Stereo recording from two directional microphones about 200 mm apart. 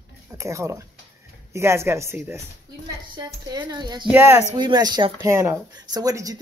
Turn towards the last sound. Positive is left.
turn(degrees=-15)  # may be behind; listen again after turning